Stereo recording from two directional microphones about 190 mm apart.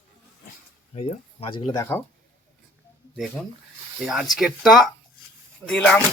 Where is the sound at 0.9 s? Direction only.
30° left (ahead or behind); by 2.0 s 15° left (ahead or behind).